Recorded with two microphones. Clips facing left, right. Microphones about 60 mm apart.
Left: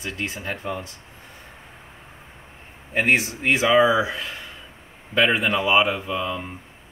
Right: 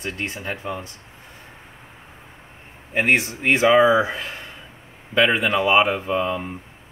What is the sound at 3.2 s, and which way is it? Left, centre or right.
Speech, right.